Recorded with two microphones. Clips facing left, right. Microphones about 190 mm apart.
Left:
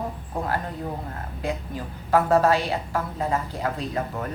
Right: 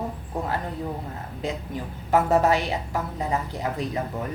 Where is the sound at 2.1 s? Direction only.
20° right (ahead or behind).